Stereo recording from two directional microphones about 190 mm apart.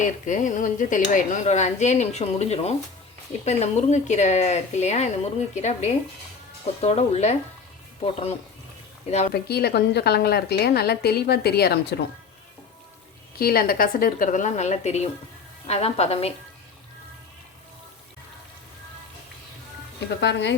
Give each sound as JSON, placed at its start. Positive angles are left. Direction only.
{"t": 0.0, "sound": "speech", "side_deg": 40}
{"t": 9.3, "sound": "a woman's voice", "side_deg": 55}
{"t": 13.4, "sound": "speech", "side_deg": 50}
{"t": 20.1, "sound": "a woman's voice", "side_deg": 65}